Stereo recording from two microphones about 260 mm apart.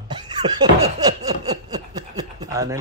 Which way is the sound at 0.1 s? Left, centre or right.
Centre.